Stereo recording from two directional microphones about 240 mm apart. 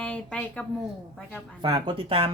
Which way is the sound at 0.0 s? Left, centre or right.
Centre.